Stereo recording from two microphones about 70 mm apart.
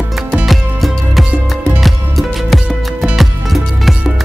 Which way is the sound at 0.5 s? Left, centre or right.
Centre.